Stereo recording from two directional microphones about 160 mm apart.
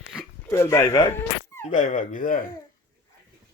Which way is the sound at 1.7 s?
50° left (ahead or behind).